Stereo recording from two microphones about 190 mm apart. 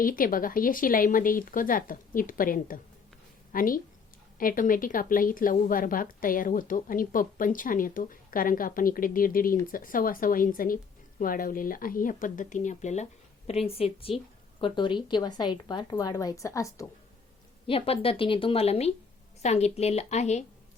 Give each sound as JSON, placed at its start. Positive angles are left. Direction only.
{"t": 0.0, "sound": "a woman's voice", "side_deg": 45}
{"t": 17.7, "sound": "a woman's voice", "side_deg": 30}